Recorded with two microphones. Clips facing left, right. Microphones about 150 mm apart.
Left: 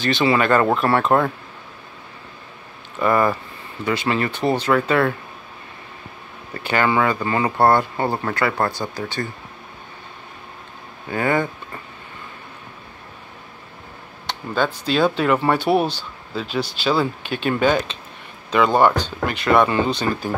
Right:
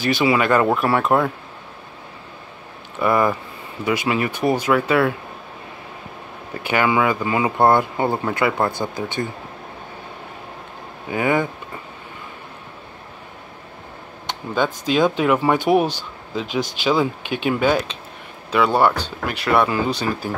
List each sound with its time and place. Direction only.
0.0 s speech: 10° right (ahead or behind)
3.0 s speech: 10° right (ahead or behind)
6.5 s speech: 10° right (ahead or behind)
11.1 s speech: 15° right (ahead or behind)
14.5 s speech: 15° right (ahead or behind)